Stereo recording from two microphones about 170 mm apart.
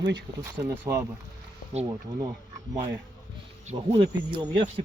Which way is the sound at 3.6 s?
35° right (ahead or behind).